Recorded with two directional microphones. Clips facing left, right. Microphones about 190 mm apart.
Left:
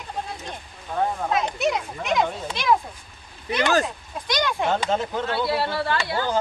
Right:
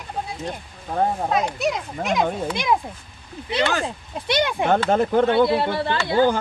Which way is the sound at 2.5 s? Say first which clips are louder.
Left 3 dB; 15° right (ahead or behind).